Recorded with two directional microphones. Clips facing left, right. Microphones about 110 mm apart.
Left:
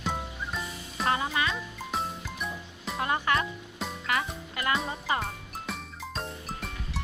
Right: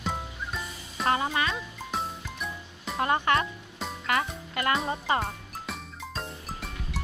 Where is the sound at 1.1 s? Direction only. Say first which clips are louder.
Right 2 dB; 35° right (ahead or behind).